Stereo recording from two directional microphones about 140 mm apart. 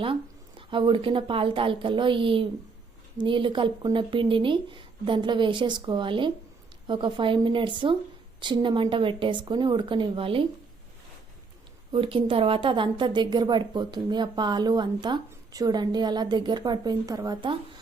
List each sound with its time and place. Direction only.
0.0 s a woman's voice: 40° right (ahead or behind)
11.9 s a woman's voice: 40° right (ahead or behind)